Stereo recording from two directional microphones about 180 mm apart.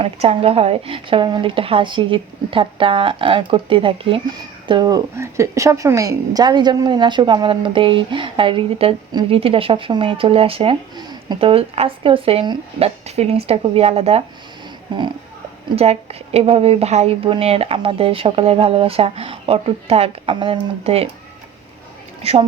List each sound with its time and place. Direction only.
0.0 s a woman's voice: 35° right (ahead or behind)
15.7 s a woman's voice: 35° right (ahead or behind)
22.2 s speech: 35° right (ahead or behind)